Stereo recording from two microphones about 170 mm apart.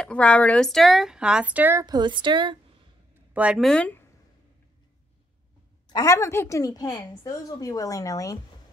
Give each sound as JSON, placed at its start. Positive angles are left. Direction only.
{"t": 0.0, "sound": "speech", "side_deg": 5}
{"t": 3.3, "sound": "speech", "side_deg": -5}
{"t": 5.9, "sound": "a woman's voice", "side_deg": 20}